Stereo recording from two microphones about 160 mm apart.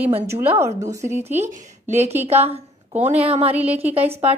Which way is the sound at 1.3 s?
50° right (ahead or behind).